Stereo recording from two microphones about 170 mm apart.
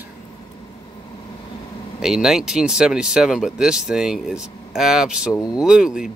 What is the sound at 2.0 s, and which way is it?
Speech, 5° right (ahead or behind).